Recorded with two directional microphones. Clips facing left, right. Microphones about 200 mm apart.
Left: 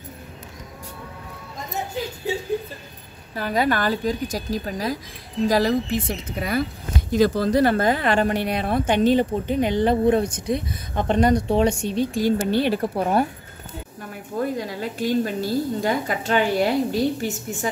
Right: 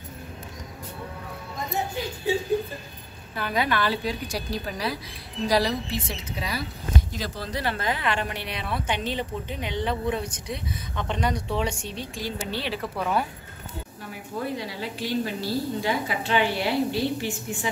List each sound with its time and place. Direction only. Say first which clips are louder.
3.3 s speech: left 4 dB; 40° left (ahead or behind)
14.4 s speech: left 6 dB; 45° left (ahead or behind)